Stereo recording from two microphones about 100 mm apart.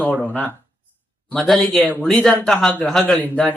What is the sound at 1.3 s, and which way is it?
Speech, 5° left (ahead or behind).